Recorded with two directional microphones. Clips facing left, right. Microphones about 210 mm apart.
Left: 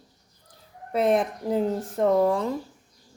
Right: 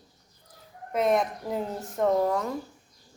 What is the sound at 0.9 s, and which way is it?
Speech, 30° left (ahead or behind).